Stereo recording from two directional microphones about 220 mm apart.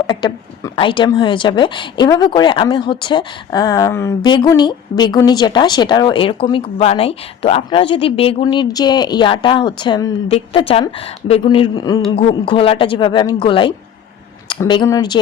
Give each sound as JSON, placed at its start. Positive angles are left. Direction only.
{"t": 0.1, "sound": "a woman's voice", "side_deg": 20}